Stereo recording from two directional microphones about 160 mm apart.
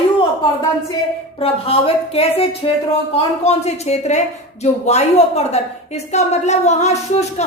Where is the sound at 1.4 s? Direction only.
35° left (ahead or behind).